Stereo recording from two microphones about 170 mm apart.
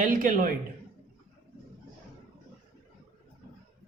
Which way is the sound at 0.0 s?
50° right (ahead or behind).